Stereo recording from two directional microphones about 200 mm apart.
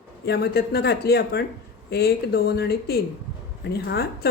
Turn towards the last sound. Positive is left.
turn(degrees=55)  # may be behind; listen again after turning